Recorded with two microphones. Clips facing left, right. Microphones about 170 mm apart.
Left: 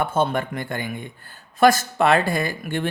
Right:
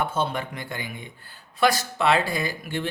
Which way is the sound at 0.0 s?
50° left (ahead or behind).